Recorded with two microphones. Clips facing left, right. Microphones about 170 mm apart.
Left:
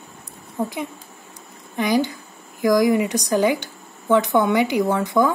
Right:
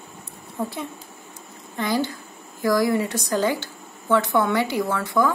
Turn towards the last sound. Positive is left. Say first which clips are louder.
# left 3 dB
turn(degrees=20)  # may be behind; listen again after turning